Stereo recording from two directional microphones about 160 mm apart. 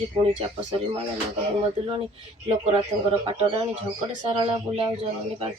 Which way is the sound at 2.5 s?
40° right (ahead or behind).